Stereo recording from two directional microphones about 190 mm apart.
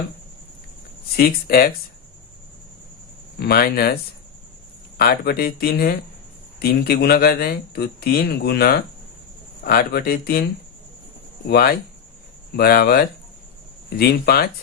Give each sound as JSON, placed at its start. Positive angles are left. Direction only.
{"t": 1.1, "sound": "speech", "side_deg": 55}
{"t": 3.4, "sound": "speech", "side_deg": 55}
{"t": 4.9, "sound": "speech", "side_deg": 55}
{"t": 11.4, "sound": "speech", "side_deg": 55}